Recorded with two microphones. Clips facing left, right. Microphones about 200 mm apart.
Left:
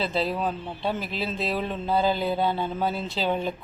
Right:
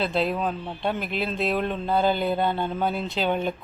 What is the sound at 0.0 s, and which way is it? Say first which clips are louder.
Speech: right 2 dB; centre (ahead or behind).